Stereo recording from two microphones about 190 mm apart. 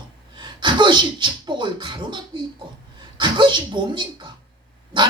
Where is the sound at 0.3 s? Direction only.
25° right (ahead or behind).